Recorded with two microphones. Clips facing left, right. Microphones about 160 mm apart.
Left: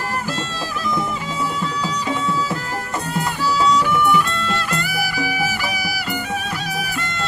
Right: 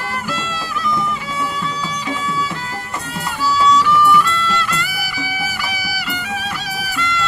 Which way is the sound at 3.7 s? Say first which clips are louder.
Right 3 dB; 50° left (ahead or behind).